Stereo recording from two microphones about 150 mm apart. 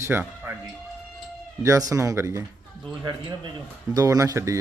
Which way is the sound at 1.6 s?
20° right (ahead or behind).